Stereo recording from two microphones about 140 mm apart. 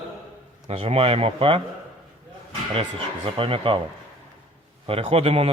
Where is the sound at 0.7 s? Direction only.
45° right (ahead or behind).